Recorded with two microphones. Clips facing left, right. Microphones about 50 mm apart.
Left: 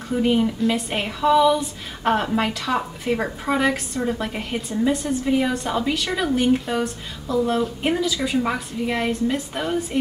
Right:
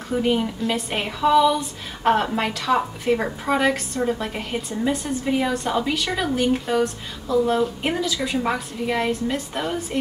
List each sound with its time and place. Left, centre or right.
0.1 s a woman's voice: centre